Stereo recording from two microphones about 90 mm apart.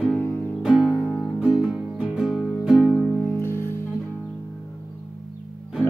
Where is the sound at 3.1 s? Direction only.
25° left (ahead or behind).